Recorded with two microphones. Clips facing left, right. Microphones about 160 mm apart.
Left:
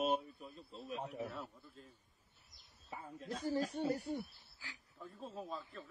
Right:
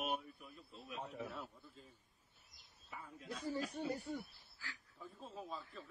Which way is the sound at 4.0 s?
70° left (ahead or behind).